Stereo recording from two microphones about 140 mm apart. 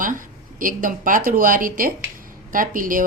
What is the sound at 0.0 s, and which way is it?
Speech, 75° right (ahead or behind).